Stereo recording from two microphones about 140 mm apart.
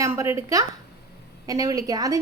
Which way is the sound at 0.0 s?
20° right (ahead or behind).